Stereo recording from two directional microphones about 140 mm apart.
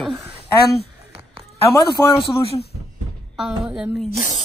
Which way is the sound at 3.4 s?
5° right (ahead or behind).